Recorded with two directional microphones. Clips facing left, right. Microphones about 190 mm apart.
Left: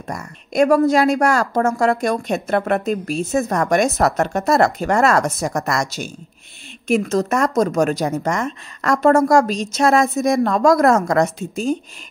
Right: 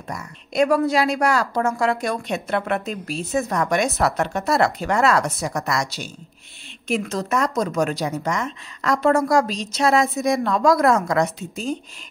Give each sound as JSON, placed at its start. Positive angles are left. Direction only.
{"t": 0.1, "sound": "a woman's voice", "side_deg": 45}